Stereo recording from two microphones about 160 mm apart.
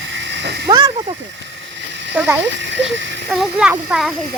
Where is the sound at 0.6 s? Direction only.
30° right (ahead or behind).